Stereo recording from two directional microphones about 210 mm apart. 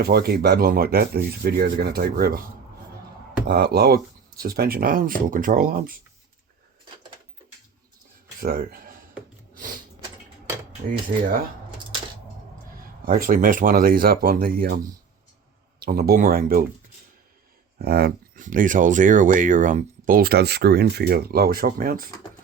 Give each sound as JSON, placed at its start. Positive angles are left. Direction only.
{"t": 0.0, "sound": "speech", "side_deg": -50}
{"t": 3.4, "sound": "speech", "side_deg": -50}
{"t": 8.4, "sound": "speech", "side_deg": -45}
{"t": 11.1, "sound": "speech", "side_deg": -40}
{"t": 13.1, "sound": "speech", "side_deg": -40}
{"t": 15.8, "sound": "speech", "side_deg": -45}
{"t": 17.7, "sound": "a sound", "side_deg": -50}
{"t": 18.4, "sound": "speech", "side_deg": -40}